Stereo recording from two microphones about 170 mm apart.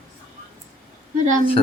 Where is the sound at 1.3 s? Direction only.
50° right (ahead or behind).